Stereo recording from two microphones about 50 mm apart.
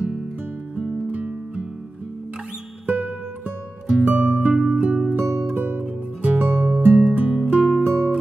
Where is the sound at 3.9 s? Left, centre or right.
Centre.